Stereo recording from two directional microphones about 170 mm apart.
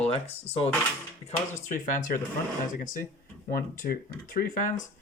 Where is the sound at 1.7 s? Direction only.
50° left (ahead or behind).